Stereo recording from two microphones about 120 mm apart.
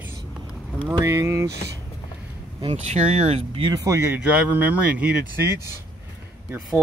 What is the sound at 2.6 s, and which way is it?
Speech, 60° right (ahead or behind).